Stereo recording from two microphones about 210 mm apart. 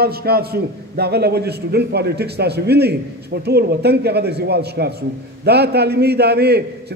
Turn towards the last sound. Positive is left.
turn(degrees=-50)  # may be behind; listen again after turning